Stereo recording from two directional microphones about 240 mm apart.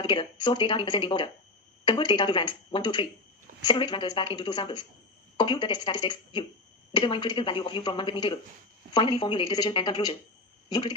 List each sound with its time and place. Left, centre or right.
0.0 s a woman's voice: centre